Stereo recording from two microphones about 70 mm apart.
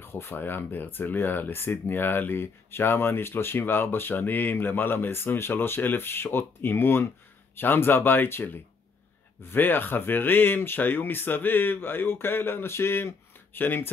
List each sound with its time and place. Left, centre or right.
0.0 s speech: left